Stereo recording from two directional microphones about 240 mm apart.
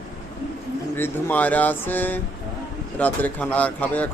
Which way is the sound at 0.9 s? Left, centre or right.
Centre.